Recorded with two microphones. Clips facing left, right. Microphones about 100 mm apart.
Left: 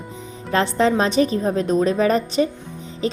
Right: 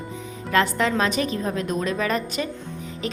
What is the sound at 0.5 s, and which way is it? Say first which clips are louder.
A woman's voice: left 3 dB; 30° left (ahead or behind).